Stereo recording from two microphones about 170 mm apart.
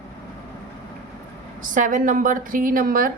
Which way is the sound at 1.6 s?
50° right (ahead or behind).